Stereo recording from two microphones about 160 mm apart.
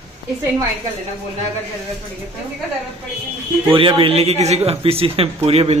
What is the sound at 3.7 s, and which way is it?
A man's voice, 35° right (ahead or behind).